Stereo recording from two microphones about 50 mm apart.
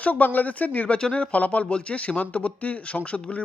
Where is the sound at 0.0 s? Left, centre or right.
Left.